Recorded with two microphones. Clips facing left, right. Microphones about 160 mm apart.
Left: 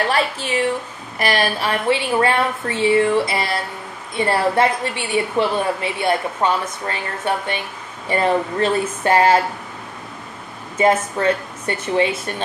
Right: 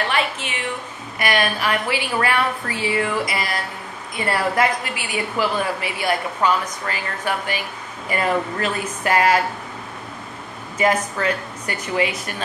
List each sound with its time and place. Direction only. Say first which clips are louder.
0.1 s a woman's voice: left 4 dB; 35° left (ahead or behind)
10.8 s a woman's voice: left 3 dB; 25° left (ahead or behind)